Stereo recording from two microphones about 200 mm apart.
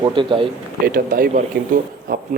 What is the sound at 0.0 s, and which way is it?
Speech, 25° right (ahead or behind).